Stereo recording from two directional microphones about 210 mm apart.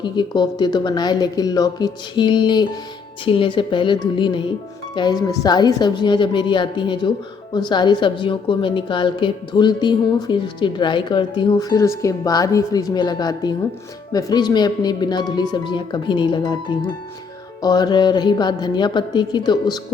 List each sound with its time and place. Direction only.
0.0 s a woman's voice: 20° left (ahead or behind)